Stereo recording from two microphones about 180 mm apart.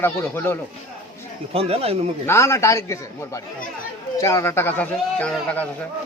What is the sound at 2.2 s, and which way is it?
Speech, 15° left (ahead or behind).